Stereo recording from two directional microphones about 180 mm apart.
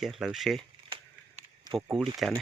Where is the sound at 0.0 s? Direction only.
Centre (ahead or behind).